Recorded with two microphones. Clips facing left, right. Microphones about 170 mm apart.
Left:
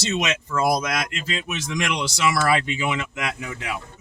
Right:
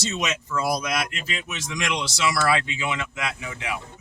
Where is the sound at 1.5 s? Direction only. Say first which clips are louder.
Left 2 dB; 55° left (ahead or behind).